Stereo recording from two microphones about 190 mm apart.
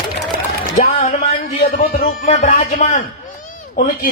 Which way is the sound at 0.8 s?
40° left (ahead or behind).